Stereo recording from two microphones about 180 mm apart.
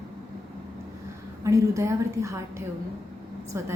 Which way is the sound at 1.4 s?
15° right (ahead or behind).